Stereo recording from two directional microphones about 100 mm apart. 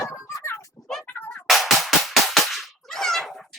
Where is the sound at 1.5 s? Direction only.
Centre (ahead or behind).